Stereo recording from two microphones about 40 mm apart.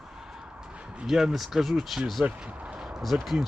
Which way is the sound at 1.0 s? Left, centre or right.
Centre.